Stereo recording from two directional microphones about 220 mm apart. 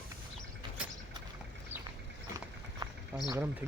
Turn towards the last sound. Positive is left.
turn(degrees=-10)  # may be behind; listen again after turning